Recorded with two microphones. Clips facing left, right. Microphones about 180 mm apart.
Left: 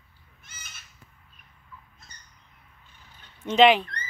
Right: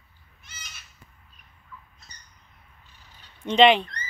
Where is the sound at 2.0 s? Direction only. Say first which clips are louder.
Even; 55° left (ahead or behind).